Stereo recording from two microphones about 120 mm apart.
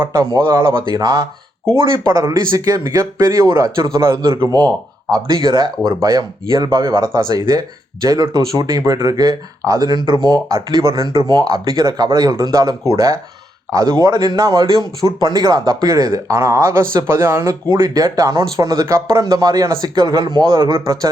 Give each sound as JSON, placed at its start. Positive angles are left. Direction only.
{"t": 0.0, "sound": "speech", "side_deg": -40}
{"t": 1.7, "sound": "speech", "side_deg": -45}
{"t": 2.0, "sound": "speech", "side_deg": -35}